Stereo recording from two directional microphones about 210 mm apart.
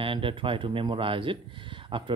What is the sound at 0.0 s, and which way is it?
Speech, 25° right (ahead or behind).